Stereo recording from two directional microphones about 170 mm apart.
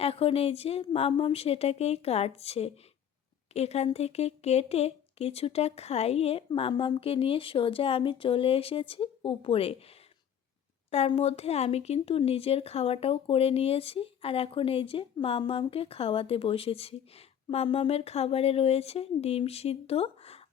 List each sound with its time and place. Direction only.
0.0 s speech: 35° left (ahead or behind)
10.9 s speech: 40° left (ahead or behind)